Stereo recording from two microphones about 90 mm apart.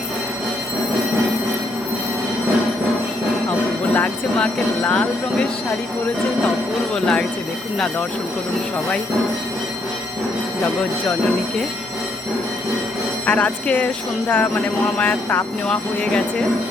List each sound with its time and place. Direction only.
3.9 s speech: 15° left (ahead or behind)
6.9 s speech: 10° left (ahead or behind)
13.2 s speech: 15° left (ahead or behind)
15.6 s speech: 10° left (ahead or behind)